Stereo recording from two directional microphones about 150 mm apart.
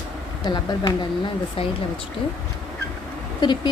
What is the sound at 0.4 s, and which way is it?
Speech, 25° left (ahead or behind).